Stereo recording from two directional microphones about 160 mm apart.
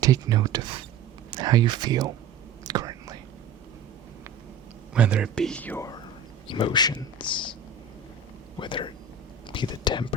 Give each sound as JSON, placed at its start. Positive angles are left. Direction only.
{"t": 0.0, "sound": "speech", "side_deg": -25}
{"t": 2.6, "sound": "whispering", "side_deg": -25}
{"t": 4.9, "sound": "speech", "side_deg": -5}
{"t": 5.3, "sound": "speech", "side_deg": 5}
{"t": 6.5, "sound": "speech", "side_deg": 30}
{"t": 8.5, "sound": "speech", "side_deg": 30}